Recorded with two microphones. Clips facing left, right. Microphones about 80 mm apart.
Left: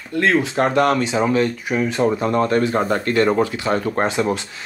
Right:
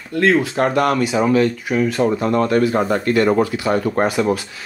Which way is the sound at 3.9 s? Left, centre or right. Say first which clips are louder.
Right 2 dB; left.